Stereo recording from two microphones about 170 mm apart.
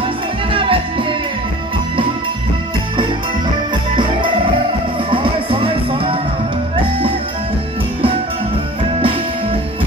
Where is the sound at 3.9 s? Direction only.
30° right (ahead or behind).